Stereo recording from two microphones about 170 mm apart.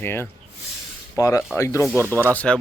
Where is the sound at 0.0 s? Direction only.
15° left (ahead or behind).